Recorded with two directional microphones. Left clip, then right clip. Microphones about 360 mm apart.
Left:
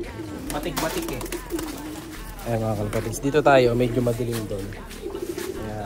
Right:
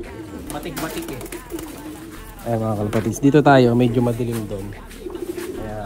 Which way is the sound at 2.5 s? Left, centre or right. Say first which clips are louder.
Right 4 dB; centre.